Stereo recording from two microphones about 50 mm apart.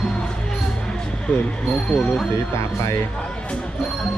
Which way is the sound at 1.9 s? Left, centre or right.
Centre.